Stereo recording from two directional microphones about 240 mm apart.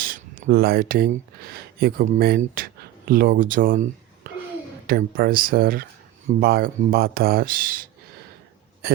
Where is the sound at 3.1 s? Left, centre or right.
Right.